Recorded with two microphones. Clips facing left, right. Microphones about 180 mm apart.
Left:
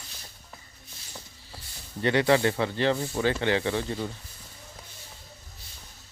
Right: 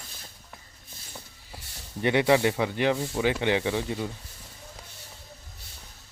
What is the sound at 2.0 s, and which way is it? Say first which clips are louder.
Speech: right 1 dB; 15° right (ahead or behind).